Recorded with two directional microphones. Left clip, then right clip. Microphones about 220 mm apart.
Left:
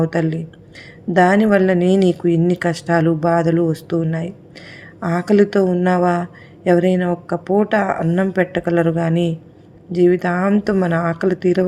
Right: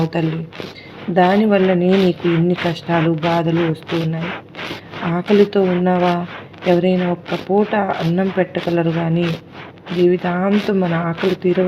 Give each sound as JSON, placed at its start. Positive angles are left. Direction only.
{"t": 0.1, "sound": "speech", "side_deg": 30}